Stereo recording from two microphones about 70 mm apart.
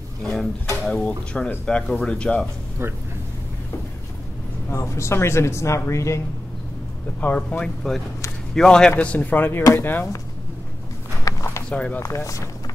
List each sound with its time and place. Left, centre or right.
0.2 s drawer open or close: centre
0.8 s speech: centre
1.5 s speech: centre
2.8 s speech: right
4.6 s speech: left
7.2 s speech: left
8.9 s speech: left
11.2 s a sound: left
11.7 s speech: centre
12.0 s speech: left